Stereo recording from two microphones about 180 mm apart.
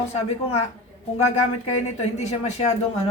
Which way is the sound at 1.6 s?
35° left (ahead or behind).